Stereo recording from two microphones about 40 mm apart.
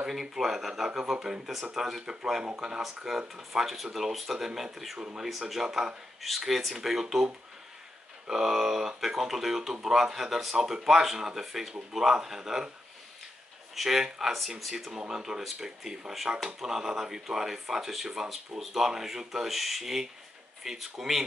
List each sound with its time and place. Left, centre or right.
0.1 s speech: centre
3.2 s speech: centre
3.6 s speech: centre
4.9 s speech: right
5.5 s speech: centre
8.3 s speech: centre
13.7 s speech: centre
14.9 s speech: centre